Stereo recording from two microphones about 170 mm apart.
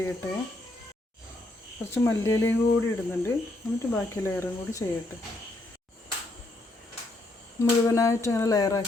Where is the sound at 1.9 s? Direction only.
15° left (ahead or behind).